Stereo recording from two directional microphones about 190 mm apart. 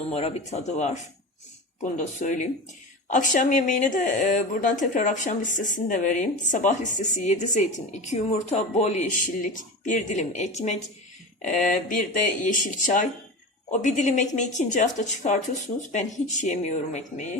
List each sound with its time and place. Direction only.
0.1 s speech: 35° left (ahead or behind)